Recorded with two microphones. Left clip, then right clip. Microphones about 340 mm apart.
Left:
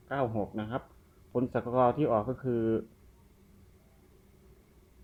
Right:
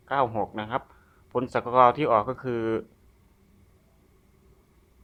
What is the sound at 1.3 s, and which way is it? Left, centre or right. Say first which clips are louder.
Speech: right 4 dB; right.